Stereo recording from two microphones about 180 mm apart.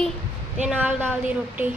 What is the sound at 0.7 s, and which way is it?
Speech, 10° right (ahead or behind).